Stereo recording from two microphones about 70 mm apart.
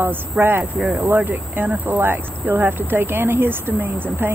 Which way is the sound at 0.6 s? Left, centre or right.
Centre.